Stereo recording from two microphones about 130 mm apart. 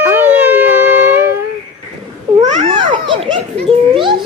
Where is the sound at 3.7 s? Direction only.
40° right (ahead or behind).